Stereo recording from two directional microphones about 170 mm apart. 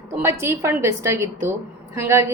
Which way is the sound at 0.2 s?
15° right (ahead or behind).